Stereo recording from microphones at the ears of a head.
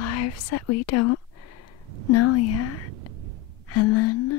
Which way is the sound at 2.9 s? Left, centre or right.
Right.